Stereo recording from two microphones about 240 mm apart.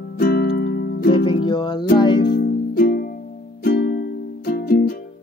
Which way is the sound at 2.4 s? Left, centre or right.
Left.